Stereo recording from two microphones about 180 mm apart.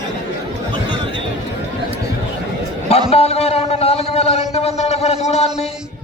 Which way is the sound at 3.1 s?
35° left (ahead or behind).